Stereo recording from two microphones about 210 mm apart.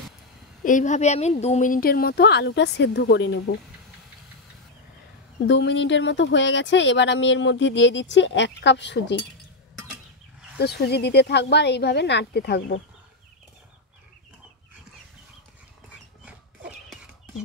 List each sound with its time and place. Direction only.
0.7 s speech: 35° left (ahead or behind); by 3.5 s 55° left (ahead or behind)
5.5 s speech: 60° left (ahead or behind)
10.6 s speech: 50° left (ahead or behind)